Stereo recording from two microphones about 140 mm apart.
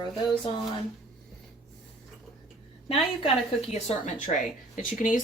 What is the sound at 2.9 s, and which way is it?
A woman's voice, 45° left (ahead or behind).